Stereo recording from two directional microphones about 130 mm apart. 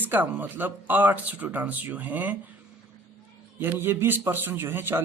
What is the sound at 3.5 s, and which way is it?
Speech, 15° right (ahead or behind).